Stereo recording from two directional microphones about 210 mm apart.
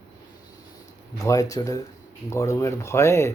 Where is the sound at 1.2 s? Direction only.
15° left (ahead or behind).